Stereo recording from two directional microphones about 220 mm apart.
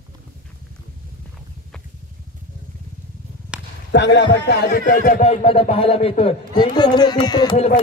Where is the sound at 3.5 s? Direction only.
5° right (ahead or behind).